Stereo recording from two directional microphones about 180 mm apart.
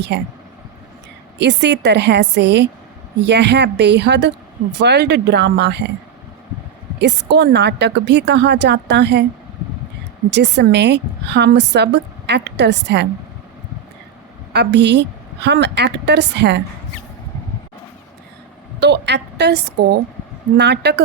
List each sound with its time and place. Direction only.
0.1 s a woman's voice: 70° right (ahead or behind)
1.4 s a woman's voice: 70° right (ahead or behind)
7.0 s a woman's voice: 70° right (ahead or behind)
10.3 s a woman's voice: 70° right (ahead or behind)
14.5 s a woman's voice: 70° right (ahead or behind)
18.8 s a woman's voice: 70° right (ahead or behind)